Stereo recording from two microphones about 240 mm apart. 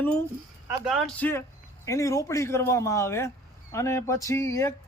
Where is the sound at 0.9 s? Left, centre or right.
Centre.